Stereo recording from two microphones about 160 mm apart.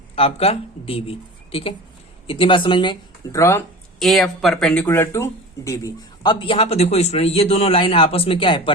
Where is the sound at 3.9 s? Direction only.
Centre (ahead or behind).